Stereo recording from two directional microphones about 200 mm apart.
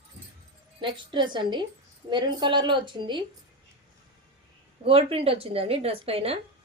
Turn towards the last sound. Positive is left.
turn(degrees=-30)  # may be behind; listen again after turning